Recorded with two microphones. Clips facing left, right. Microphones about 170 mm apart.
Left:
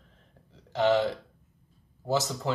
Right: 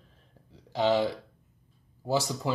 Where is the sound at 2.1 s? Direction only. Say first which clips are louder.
Even; 15° right (ahead or behind).